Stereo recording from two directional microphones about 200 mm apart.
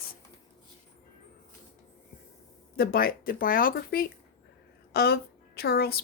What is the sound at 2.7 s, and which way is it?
A woman's voice, 50° left (ahead or behind).